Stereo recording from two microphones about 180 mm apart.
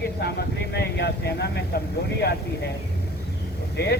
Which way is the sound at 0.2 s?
65° left (ahead or behind).